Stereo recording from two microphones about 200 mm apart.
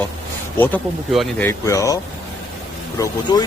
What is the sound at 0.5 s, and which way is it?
Speech, 10° left (ahead or behind).